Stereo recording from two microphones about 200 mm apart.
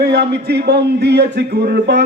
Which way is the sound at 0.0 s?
55° right (ahead or behind).